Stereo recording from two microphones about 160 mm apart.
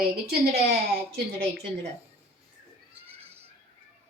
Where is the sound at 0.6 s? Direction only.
80° right.